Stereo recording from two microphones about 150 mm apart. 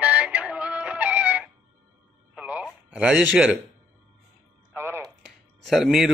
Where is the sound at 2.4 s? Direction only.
10° right (ahead or behind).